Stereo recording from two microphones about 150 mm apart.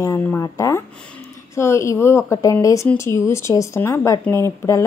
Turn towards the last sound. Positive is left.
turn(degrees=20)  # may be behind; listen again after turning